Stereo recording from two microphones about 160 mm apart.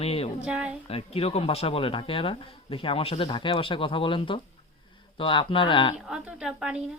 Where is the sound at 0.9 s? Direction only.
40° left (ahead or behind).